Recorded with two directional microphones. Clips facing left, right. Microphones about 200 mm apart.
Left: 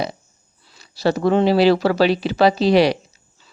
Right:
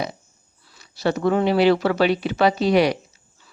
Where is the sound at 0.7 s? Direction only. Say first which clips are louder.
Left 3 dB; 35° left (ahead or behind).